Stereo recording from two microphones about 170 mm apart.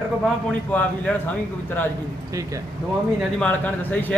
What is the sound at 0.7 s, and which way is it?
A man's voice, 10° left (ahead or behind).